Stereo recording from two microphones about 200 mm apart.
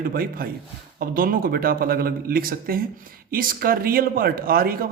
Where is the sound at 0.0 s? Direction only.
45° right (ahead or behind).